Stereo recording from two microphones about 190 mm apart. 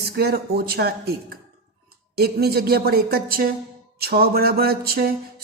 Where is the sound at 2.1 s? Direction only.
55° right (ahead or behind).